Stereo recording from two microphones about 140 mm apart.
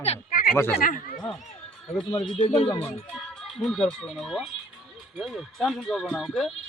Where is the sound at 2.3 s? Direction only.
40° left (ahead or behind).